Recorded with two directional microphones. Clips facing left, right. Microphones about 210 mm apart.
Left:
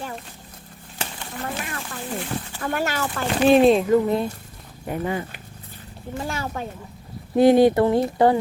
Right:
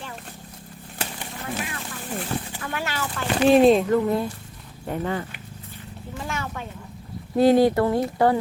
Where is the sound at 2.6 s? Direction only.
45° left (ahead or behind).